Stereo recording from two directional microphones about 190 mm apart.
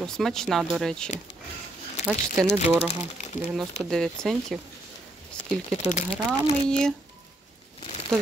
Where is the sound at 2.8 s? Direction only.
35° left (ahead or behind).